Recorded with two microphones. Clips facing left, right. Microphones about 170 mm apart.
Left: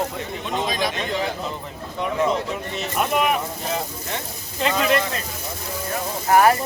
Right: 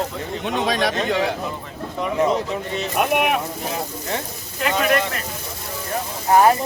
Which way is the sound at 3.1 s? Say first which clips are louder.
Even; 65° right (ahead or behind).